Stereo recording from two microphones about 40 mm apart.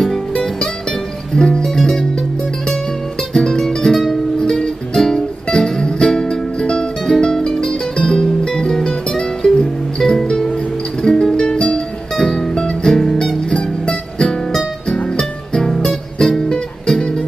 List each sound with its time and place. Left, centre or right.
1.3 s music: centre
4.4 s music: centre
13.5 s music: left